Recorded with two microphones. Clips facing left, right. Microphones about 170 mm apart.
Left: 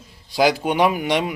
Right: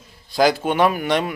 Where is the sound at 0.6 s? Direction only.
15° left (ahead or behind).